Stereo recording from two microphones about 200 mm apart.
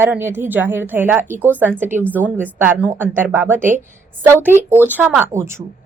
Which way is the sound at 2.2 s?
10° right (ahead or behind).